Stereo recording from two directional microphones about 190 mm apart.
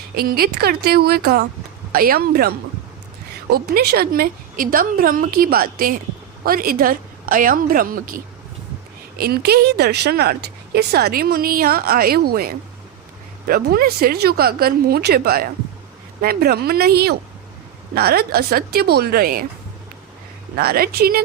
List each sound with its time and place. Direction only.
0.2 s a woman's voice: 50° right (ahead or behind)
3.5 s a woman's voice: 55° right (ahead or behind)
20.6 s a woman's voice: 55° right (ahead or behind)